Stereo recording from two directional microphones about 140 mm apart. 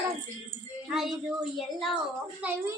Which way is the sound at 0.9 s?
Centre (ahead or behind).